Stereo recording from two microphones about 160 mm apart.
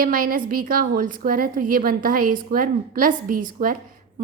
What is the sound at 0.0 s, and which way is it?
A woman's voice, 65° right (ahead or behind).